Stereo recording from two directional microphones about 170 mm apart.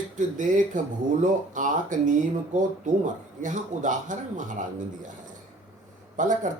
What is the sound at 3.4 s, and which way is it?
Speech, 50° right (ahead or behind).